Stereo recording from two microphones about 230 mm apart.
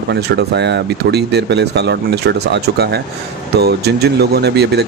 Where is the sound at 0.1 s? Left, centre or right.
Right.